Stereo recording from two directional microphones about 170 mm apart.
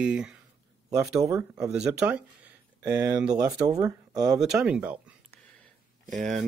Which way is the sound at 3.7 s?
20° right (ahead or behind).